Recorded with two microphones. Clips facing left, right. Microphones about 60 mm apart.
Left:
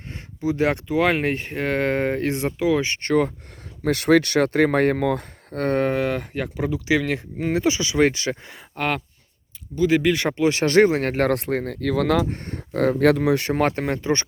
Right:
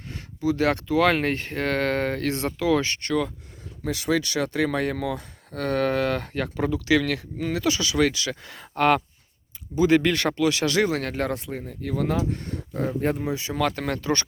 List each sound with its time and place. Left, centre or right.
0.4 s speech: left
3.0 s speech: left
3.8 s speech: left
5.8 s speech: centre
8.5 s speech: centre
10.3 s speech: left
13.6 s speech: left
13.8 s speech: left